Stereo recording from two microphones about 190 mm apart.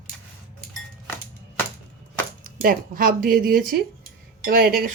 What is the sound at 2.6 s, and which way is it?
Speech, 50° right (ahead or behind).